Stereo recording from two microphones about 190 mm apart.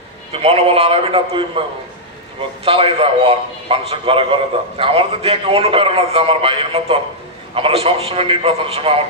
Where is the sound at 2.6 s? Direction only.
30° right (ahead or behind).